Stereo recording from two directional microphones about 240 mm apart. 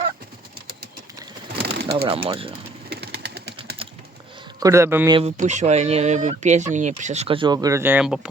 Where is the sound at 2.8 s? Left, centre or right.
Right.